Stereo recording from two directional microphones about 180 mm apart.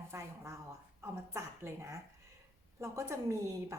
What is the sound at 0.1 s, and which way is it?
A woman's voice, 15° right (ahead or behind).